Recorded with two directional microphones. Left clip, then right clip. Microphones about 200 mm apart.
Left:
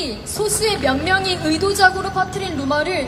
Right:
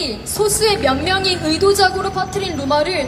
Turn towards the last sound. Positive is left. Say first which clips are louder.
# right 3 dB
turn(degrees=-25)  # may be behind; listen again after turning